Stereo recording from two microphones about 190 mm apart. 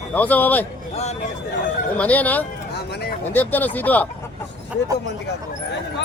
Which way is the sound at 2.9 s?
55° left (ahead or behind).